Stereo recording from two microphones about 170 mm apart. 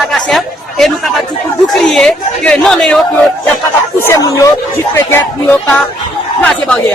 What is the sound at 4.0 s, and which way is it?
Speech, 15° left (ahead or behind).